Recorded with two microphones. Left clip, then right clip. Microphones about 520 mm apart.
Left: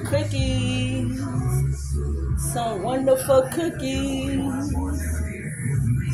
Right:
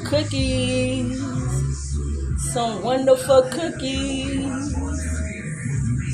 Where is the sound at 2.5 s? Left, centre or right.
Left.